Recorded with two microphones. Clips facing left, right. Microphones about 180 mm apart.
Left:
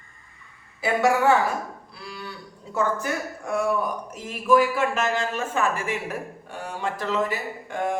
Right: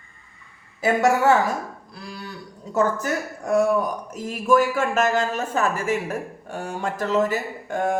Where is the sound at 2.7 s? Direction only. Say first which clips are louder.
Right 3 dB; 40° right (ahead or behind).